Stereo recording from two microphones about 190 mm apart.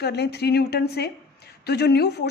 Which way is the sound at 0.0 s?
60° left (ahead or behind).